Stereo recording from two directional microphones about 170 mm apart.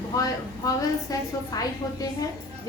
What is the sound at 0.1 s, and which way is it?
Child singing, 20° left (ahead or behind).